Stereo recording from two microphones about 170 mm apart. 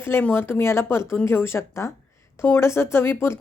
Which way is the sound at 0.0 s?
10° left (ahead or behind).